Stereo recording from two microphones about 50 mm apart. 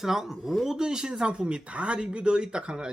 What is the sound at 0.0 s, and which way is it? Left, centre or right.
A man's voice, centre.